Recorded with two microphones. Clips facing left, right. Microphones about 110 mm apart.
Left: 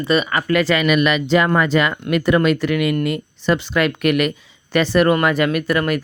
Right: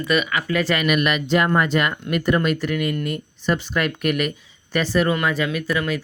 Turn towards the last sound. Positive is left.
turn(degrees=60)  # may be behind; listen again after turning